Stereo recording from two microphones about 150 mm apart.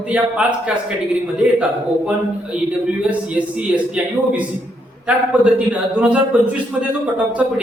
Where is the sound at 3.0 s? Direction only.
10° right (ahead or behind).